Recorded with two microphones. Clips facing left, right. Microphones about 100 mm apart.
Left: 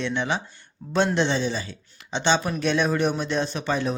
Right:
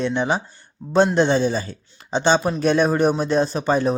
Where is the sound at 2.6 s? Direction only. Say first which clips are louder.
Right 5 dB; 40° right (ahead or behind).